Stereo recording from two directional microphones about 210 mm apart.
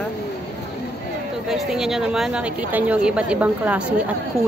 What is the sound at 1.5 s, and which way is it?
A woman's voice, centre (ahead or behind).